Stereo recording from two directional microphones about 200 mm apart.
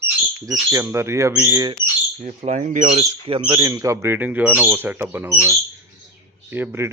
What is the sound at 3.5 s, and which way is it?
Speech, 10° right (ahead or behind).